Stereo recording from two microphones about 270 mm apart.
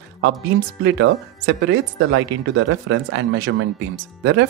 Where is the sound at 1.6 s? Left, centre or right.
Right.